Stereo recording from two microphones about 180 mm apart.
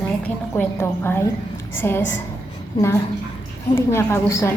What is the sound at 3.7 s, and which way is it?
Speech, 15° left (ahead or behind).